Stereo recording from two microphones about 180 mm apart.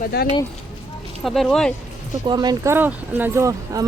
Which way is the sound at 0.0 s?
55° left (ahead or behind).